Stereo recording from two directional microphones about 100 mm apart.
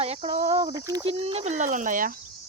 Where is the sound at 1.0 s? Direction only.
70° right (ahead or behind).